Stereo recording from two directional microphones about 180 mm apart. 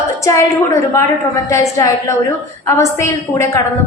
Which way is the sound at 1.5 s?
15° left (ahead or behind).